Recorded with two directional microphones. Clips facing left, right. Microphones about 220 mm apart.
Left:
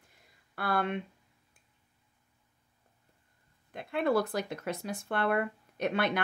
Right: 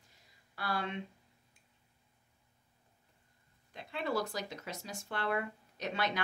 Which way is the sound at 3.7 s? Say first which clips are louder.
Left 8 dB; 55° left (ahead or behind).